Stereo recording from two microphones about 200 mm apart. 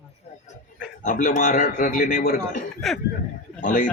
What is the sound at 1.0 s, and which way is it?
A man's voice, 40° left (ahead or behind).